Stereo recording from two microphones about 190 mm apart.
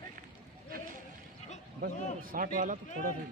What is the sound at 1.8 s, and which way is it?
A man's voice, 45° right (ahead or behind).